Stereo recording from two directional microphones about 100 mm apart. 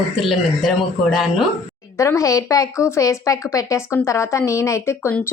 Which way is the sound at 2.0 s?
30° left (ahead or behind).